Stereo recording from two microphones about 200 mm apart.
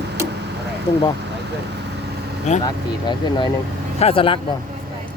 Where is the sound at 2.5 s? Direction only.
35° left (ahead or behind).